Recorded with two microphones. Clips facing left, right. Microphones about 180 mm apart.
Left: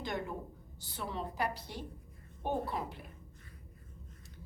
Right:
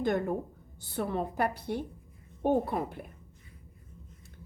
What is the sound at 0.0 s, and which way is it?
A woman's voice, 55° right (ahead or behind).